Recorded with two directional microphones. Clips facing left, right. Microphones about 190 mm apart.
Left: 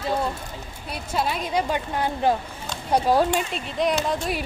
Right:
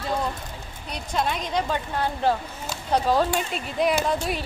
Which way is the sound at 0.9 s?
5° left (ahead or behind).